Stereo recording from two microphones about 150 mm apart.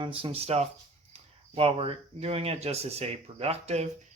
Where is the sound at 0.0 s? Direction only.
40° right (ahead or behind).